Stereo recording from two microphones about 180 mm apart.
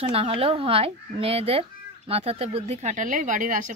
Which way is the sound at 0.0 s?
30° right (ahead or behind).